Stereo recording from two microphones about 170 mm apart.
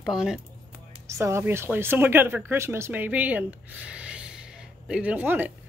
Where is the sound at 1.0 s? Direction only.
15° right (ahead or behind).